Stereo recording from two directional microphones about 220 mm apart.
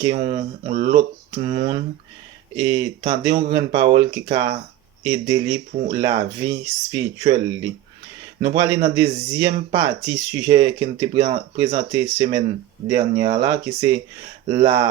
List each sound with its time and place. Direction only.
0.0 s speech: 20° right (ahead or behind)